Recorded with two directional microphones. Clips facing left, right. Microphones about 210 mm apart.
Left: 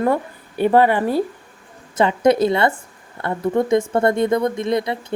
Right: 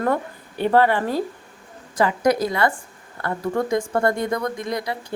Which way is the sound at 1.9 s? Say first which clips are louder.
Left 4 dB; 25° left (ahead or behind).